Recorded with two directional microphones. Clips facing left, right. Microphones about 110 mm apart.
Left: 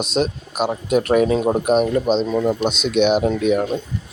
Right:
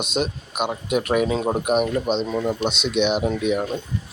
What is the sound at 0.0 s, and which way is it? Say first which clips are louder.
Speech: left 4 dB; 35° left (ahead or behind).